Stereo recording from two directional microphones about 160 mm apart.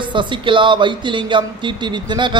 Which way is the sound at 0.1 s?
30° right (ahead or behind).